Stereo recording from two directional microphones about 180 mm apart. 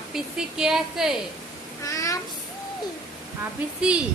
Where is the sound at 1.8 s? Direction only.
20° left (ahead or behind).